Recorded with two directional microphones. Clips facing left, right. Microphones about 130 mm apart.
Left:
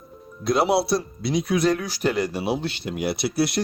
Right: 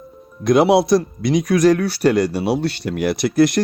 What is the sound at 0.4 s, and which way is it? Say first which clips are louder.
Speech: right 7 dB; 65° right (ahead or behind).